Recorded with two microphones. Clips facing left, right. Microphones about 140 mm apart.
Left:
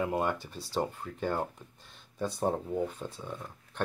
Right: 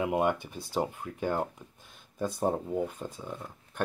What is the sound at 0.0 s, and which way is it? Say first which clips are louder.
Speech: right 3 dB; 15° right (ahead or behind).